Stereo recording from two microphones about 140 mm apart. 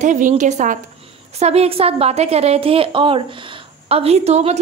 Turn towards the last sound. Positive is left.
turn(degrees=-50)  # may be behind; listen again after turning